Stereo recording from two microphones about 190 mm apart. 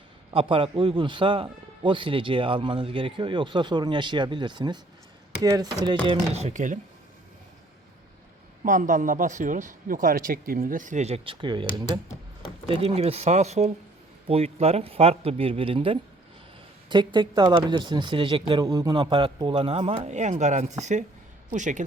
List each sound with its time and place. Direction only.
0.3 s a man's voice: 30° right (ahead or behind)
6.3 s speech: 35° right (ahead or behind)
8.6 s a man's voice: 45° right (ahead or behind); by 11.6 s 25° right (ahead or behind)
12.6 s a man's voice: 30° right (ahead or behind)